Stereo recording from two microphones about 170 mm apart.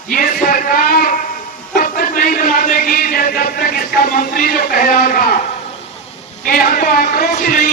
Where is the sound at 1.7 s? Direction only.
55° left (ahead or behind).